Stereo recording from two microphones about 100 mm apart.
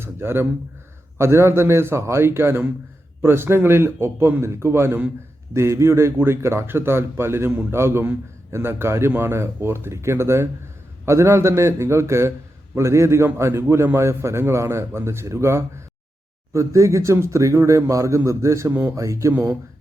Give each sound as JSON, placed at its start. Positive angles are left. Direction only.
{"t": 0.0, "sound": "a man's voice", "side_deg": -25}
{"t": 18.7, "sound": "a man's voice", "side_deg": -20}
{"t": 18.9, "sound": "a man's voice", "side_deg": -30}